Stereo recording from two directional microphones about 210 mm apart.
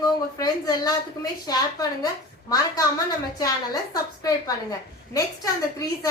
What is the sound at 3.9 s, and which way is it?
Speech, 20° left (ahead or behind).